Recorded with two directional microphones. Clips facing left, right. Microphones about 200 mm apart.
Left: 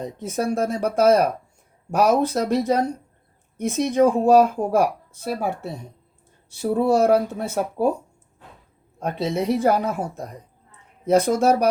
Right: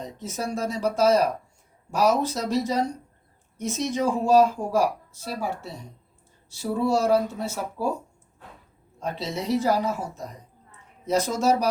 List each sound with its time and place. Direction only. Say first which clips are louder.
0.0 s speech: left 6 dB; 55° left (ahead or behind)
9.0 s speech: left 6 dB; 55° left (ahead or behind)